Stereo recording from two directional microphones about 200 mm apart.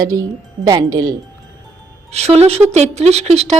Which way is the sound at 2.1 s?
30° right (ahead or behind).